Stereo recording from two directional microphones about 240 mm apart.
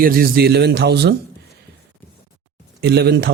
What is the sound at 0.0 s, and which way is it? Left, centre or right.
Speech, right.